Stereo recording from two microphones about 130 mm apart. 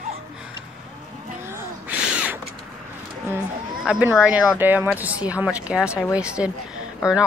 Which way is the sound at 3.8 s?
10° right (ahead or behind).